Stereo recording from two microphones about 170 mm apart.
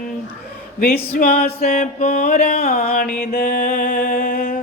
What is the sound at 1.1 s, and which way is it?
Mantra, 60° left (ahead or behind).